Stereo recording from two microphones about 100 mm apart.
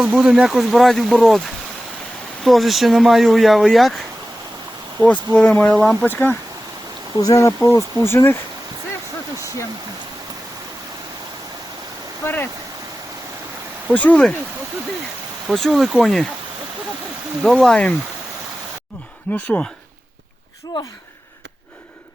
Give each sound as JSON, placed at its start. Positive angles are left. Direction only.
{"t": 0.0, "sound": "speech", "side_deg": -10}
{"t": 2.4, "sound": "speech", "side_deg": 0}
{"t": 4.9, "sound": "speech", "side_deg": 10}
{"t": 6.1, "sound": "speech", "side_deg": 20}
{"t": 7.2, "sound": "speech", "side_deg": 35}
{"t": 12.2, "sound": "speech", "side_deg": 20}
{"t": 13.8, "sound": "speech", "side_deg": 15}
{"t": 15.5, "sound": "speech", "side_deg": 0}
{"t": 17.4, "sound": "speech", "side_deg": 5}
{"t": 19.3, "sound": "speech", "side_deg": 15}